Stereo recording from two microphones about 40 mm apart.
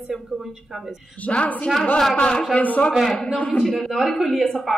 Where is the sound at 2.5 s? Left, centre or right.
Left.